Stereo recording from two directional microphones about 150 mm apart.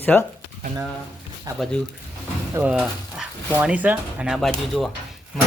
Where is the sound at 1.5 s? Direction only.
25° right (ahead or behind).